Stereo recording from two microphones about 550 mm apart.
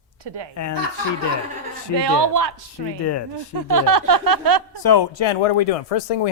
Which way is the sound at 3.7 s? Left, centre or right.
Right.